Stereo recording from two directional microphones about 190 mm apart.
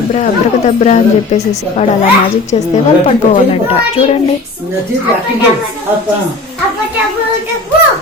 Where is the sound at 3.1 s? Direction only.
30° left (ahead or behind).